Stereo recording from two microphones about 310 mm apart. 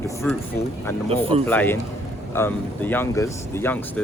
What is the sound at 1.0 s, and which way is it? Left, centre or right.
Speech, centre.